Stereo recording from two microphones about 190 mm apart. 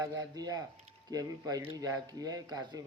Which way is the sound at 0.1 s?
20° right (ahead or behind).